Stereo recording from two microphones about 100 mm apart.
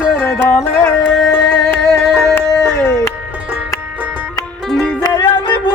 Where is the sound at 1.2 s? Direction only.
5° left (ahead or behind).